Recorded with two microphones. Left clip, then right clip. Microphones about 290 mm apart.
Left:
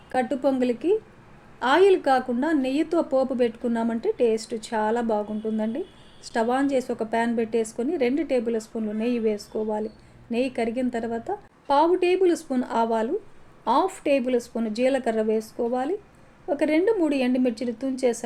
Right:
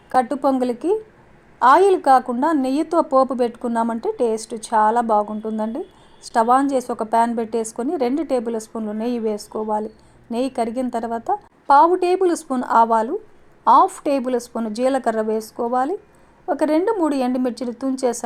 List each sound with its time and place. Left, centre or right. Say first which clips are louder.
0.2 s a woman's voice: right 5 dB; centre